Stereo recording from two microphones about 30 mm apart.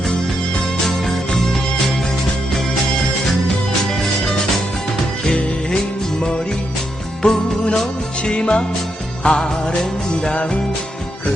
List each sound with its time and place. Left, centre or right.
7.2 s music: left
8.2 s music: left
10.3 s music: left